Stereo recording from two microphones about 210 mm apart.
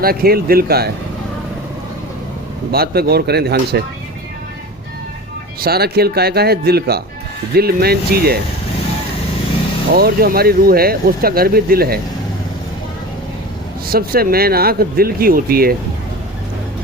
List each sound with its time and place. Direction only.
0.0 s speech: 45° right (ahead or behind)
2.7 s speech: 50° right (ahead or behind)
5.5 s speech: 45° right (ahead or behind)
9.9 s speech: 45° right (ahead or behind)
13.8 s speech: 45° right (ahead or behind)